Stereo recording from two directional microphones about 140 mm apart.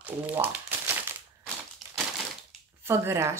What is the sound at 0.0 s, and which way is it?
Crumpling, 15° right (ahead or behind).